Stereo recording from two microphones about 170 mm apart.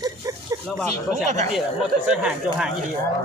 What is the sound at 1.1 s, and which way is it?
Speech, 45° right (ahead or behind).